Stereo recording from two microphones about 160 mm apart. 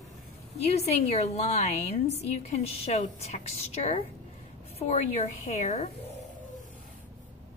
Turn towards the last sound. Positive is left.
turn(degrees=45)  # may be behind; listen again after turning